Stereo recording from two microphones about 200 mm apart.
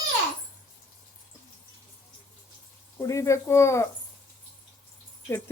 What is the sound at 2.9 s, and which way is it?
Speech, 15° left (ahead or behind).